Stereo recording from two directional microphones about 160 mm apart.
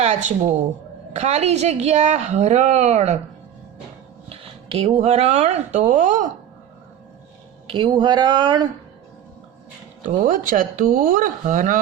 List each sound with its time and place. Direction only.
0.0 s a woman's voice: 50° right (ahead or behind)
4.3 s speech: 35° right (ahead or behind)
7.7 s speech: 30° right (ahead or behind)
10.2 s speech: 55° right (ahead or behind)